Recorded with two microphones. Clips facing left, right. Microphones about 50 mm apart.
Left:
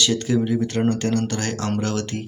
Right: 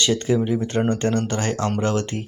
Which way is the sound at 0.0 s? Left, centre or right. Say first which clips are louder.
Right 1 dB; right.